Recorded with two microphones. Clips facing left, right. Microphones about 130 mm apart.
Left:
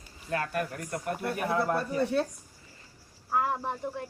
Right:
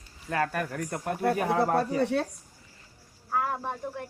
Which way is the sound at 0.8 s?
85° right.